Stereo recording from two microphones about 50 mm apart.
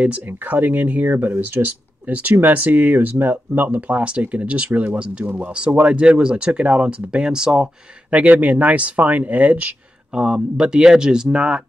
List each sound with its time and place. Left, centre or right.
0.0 s speech: right
8.1 s speech: right
10.1 s speech: centre